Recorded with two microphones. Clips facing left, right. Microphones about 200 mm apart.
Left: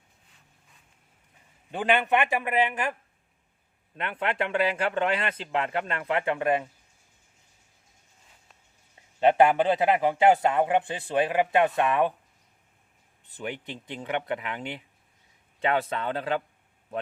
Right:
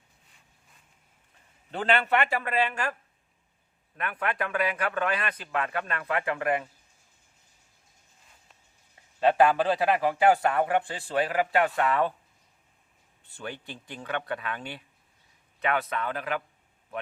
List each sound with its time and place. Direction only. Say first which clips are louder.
1.7 s a man's voice: left 1 dB; 15° left (ahead or behind)
3.9 s a man's voice: left 2 dB; 25° left (ahead or behind)
9.2 s a man's voice: left 2 dB; 20° left (ahead or behind)
13.2 s a man's voice: left 3 dB; 20° left (ahead or behind)